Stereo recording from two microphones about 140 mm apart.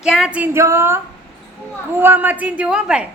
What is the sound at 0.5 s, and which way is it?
Speech, 20° right (ahead or behind).